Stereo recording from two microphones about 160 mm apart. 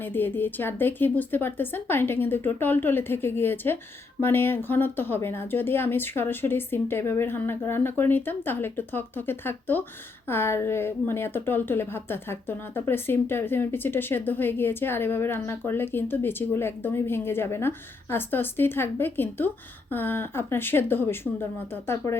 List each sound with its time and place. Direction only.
0.0 s a woman's voice: 10° left (ahead or behind)